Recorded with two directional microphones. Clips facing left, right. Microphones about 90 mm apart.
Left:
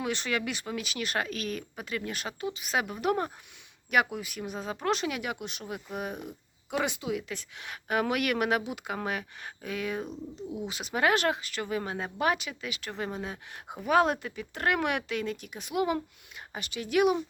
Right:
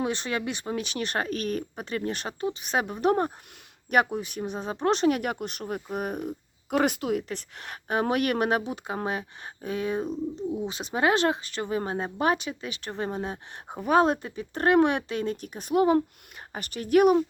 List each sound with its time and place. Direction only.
0.0 s a woman's voice: 25° right (ahead or behind); by 17.2 s 45° right (ahead or behind)